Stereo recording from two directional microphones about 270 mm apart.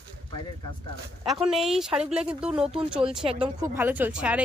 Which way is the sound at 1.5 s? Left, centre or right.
Centre.